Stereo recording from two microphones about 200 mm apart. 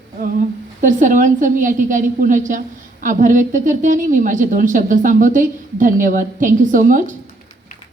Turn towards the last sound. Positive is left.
turn(degrees=-40)  # may be behind; listen again after turning